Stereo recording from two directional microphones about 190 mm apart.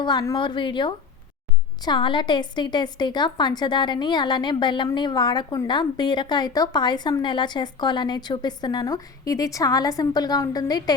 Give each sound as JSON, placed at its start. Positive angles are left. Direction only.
{"t": 0.0, "sound": "a woman's voice", "side_deg": 20}